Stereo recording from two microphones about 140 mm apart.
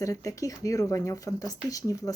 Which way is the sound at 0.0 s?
25° left (ahead or behind).